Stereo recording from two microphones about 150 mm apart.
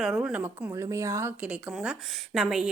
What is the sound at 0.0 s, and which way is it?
Speech, 5° right (ahead or behind).